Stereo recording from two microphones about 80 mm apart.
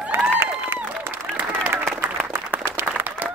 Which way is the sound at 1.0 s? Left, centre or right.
Right.